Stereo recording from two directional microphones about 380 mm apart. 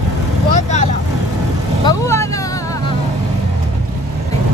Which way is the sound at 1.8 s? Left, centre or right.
Centre.